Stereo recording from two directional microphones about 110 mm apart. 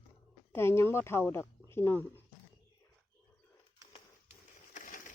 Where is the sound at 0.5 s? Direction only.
25° left (ahead or behind).